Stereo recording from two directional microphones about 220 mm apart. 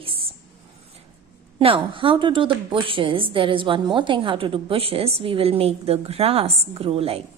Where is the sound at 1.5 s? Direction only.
25° right (ahead or behind).